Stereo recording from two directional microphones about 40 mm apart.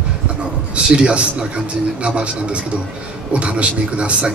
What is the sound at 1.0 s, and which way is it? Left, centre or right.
A man's voice, right.